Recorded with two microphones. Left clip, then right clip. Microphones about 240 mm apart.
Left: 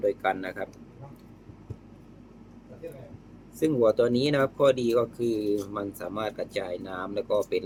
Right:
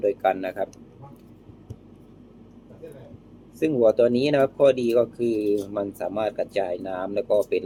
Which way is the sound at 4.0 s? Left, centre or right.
Left.